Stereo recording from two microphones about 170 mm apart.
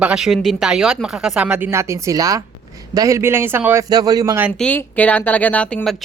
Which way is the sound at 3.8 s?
25° right (ahead or behind).